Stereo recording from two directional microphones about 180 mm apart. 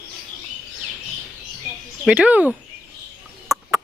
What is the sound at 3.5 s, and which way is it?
Chicken, 15° right (ahead or behind).